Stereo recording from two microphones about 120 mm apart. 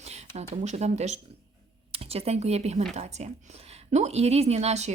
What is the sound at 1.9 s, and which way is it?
Speech, 60° right (ahead or behind).